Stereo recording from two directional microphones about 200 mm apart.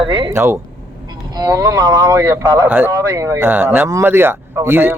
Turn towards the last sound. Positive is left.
turn(degrees=-10)  # may be behind; listen again after turning